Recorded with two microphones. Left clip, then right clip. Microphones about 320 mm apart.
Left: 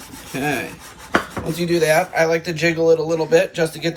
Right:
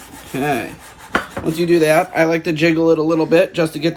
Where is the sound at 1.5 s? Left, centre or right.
Right.